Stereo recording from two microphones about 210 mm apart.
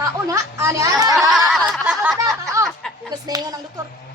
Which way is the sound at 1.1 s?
Centre (ahead or behind).